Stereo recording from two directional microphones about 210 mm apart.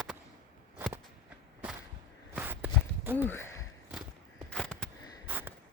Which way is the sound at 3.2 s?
10° left (ahead or behind).